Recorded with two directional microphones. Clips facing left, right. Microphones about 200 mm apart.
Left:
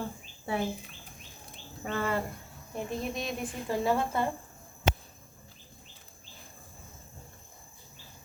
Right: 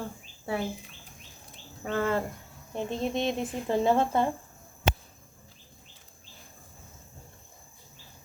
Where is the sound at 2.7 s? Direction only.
25° right (ahead or behind).